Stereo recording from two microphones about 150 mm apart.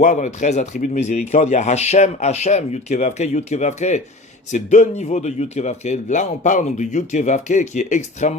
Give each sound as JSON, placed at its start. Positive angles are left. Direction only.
{"t": 0.0, "sound": "speech", "side_deg": 50}